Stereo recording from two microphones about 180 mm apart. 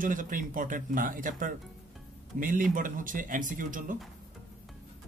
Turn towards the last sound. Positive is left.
turn(degrees=-45)  # may be behind; listen again after turning